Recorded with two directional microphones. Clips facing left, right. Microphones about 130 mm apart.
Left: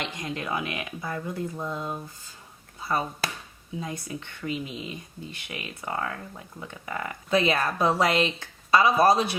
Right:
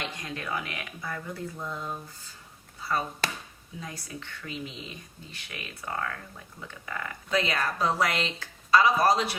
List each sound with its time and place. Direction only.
0.0 s speech: 20° left (ahead or behind)